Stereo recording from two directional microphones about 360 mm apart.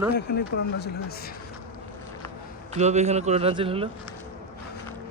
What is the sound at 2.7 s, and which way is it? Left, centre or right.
A man's voice, centre.